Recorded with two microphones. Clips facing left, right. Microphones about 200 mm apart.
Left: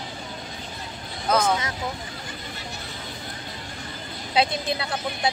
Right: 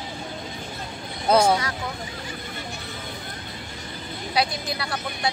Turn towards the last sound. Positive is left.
turn(degrees=25)  # may be behind; listen again after turning